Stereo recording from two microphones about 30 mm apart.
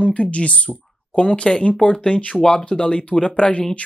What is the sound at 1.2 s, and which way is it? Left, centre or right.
Speech, left.